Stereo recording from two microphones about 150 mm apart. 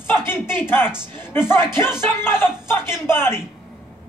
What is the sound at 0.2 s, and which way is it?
Speech, 15° left (ahead or behind).